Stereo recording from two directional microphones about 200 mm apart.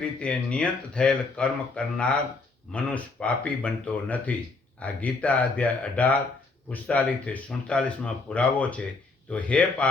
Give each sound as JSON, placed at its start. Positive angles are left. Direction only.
{"t": 0.0, "sound": "speech", "side_deg": 5}